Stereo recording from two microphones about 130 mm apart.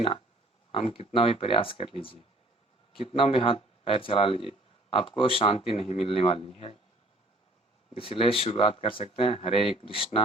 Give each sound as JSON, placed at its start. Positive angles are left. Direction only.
{"t": 0.7, "sound": "speech", "side_deg": 45}
{"t": 7.9, "sound": "speech", "side_deg": 45}